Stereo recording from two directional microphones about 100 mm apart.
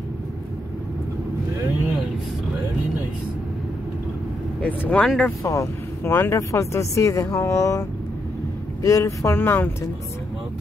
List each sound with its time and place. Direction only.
4.6 s speech: 15° left (ahead or behind)
5.4 s speech: 30° left (ahead or behind)
8.8 s speech: 30° left (ahead or behind)